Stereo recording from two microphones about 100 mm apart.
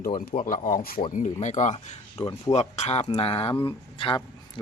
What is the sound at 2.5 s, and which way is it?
Speech, 90° left.